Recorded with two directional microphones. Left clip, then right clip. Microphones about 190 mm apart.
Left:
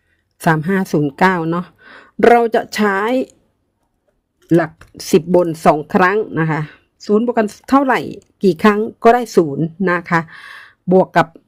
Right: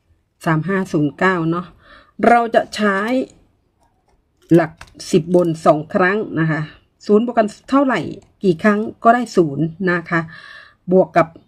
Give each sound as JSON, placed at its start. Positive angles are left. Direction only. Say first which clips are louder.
{"t": 0.3, "sound": "a woman's voice", "louder": "left 3 dB", "side_deg": 40}
{"t": 4.4, "sound": "a sound", "louder": "right 1 dB", "side_deg": 0}
{"t": 4.9, "sound": "a woman's voice", "louder": "left 3 dB", "side_deg": 45}
{"t": 7.0, "sound": "speech", "louder": "right 1 dB", "side_deg": 0}
{"t": 7.3, "sound": "a woman's voice", "louder": "left 1 dB", "side_deg": 40}